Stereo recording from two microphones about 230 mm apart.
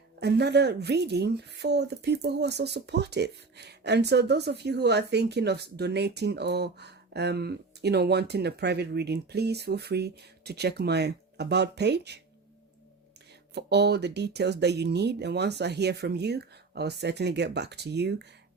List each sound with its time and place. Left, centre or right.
0.2 s speech: right
13.5 s speech: right